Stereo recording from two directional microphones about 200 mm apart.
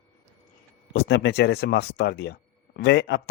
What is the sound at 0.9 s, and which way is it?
Speech, 55° left (ahead or behind).